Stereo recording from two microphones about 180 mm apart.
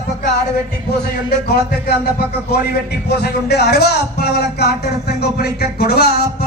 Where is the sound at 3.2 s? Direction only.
65° left (ahead or behind).